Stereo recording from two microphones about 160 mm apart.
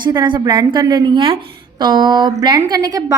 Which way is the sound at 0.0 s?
30° right (ahead or behind).